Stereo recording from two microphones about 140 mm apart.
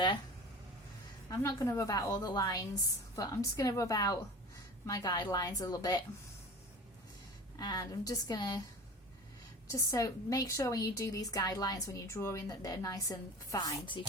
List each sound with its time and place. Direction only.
1.3 s a woman's voice: 25° left (ahead or behind)
7.6 s a woman's voice: 25° left (ahead or behind)
9.7 s a woman's voice: 25° left (ahead or behind)